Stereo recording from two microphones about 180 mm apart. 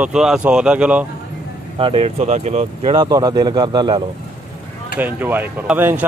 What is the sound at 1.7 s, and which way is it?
Speech, 30° right (ahead or behind).